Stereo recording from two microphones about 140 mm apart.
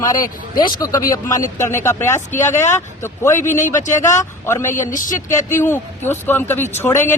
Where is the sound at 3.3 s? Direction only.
60° left (ahead or behind).